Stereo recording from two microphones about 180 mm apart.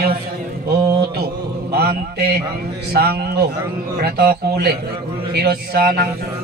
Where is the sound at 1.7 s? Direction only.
60° right (ahead or behind).